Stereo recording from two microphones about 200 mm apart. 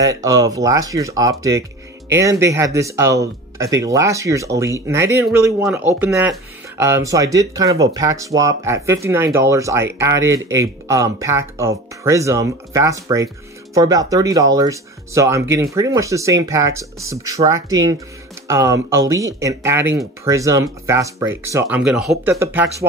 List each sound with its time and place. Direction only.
0.0 s speech: 15° right (ahead or behind)